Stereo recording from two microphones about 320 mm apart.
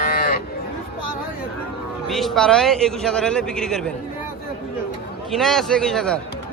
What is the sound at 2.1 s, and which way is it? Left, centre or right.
A man's voice, centre.